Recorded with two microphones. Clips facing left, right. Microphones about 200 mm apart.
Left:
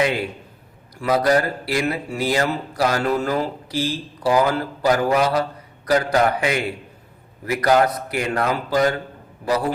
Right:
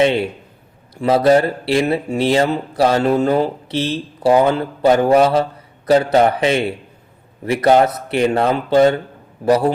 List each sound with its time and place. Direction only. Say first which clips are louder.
0.0 s speech: right 6 dB; 25° right (ahead or behind)